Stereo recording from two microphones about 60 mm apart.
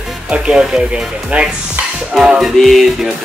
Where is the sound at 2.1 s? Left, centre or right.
Centre.